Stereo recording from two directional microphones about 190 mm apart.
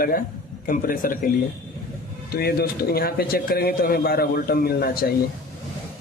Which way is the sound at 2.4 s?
55° left (ahead or behind).